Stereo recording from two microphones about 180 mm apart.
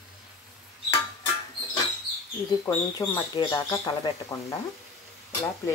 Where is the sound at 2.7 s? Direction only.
15° left (ahead or behind).